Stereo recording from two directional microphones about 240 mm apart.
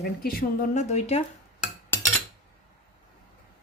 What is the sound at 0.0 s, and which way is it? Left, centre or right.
Speech, left.